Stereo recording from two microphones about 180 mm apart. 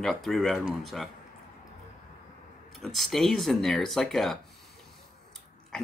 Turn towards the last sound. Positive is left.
turn(degrees=5)  # may be behind; listen again after turning